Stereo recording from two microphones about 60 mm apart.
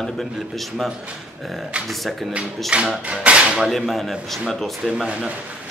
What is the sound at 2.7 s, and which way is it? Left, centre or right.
Speech, centre.